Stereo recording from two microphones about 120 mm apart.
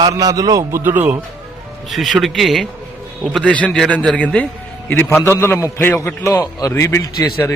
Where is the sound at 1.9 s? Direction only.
Centre (ahead or behind).